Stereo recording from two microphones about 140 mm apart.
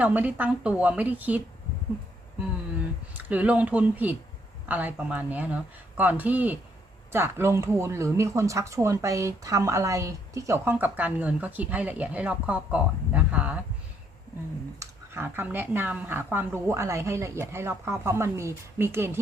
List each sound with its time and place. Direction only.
0.0 s speech: 10° right (ahead or behind)
3.2 s speech: 10° right (ahead or behind)
14.8 s speech: 15° right (ahead or behind)